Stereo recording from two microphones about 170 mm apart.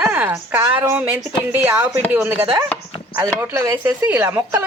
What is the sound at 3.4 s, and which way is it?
A woman's voice, 15° right (ahead or behind).